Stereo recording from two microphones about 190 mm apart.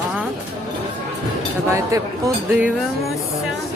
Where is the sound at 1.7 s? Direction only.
15° right (ahead or behind).